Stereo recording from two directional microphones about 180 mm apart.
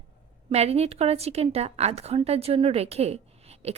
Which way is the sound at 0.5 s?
35° right (ahead or behind).